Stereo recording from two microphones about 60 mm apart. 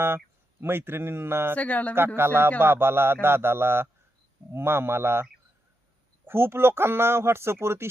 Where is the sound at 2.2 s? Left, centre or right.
Right.